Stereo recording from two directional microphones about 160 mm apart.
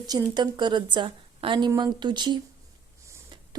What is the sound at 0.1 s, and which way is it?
Speech, 25° right (ahead or behind).